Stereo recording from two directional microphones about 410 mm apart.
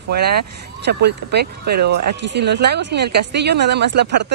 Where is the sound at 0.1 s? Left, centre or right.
Right.